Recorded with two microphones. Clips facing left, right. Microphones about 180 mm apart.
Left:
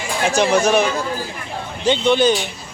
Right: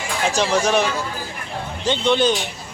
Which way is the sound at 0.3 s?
10° left (ahead or behind).